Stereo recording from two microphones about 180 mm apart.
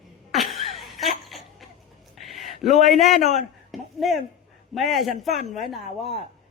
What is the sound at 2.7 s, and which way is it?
Speech, 40° left (ahead or behind).